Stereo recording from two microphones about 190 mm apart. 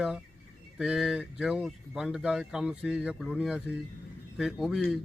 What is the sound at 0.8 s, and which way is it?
A man's voice, 5° right (ahead or behind).